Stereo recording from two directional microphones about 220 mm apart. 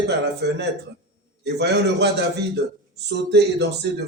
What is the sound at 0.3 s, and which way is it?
Speech, 50° right (ahead or behind).